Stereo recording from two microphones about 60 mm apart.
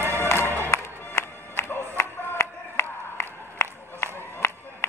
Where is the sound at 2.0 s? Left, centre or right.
Left.